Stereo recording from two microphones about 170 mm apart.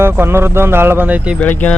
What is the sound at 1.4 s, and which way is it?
Speech, 10° left (ahead or behind).